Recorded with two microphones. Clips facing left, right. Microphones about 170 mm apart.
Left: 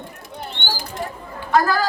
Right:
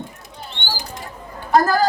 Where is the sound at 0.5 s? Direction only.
50° left (ahead or behind).